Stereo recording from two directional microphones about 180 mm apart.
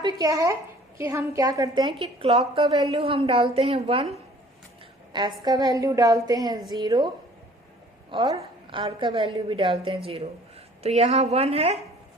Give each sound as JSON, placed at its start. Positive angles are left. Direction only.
{"t": 0.0, "sound": "a woman's voice", "side_deg": -20}
{"t": 5.1, "sound": "a woman's voice", "side_deg": -20}
{"t": 8.4, "sound": "a woman's voice", "side_deg": -25}